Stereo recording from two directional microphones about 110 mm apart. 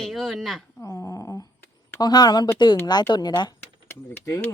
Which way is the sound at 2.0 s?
40° left (ahead or behind).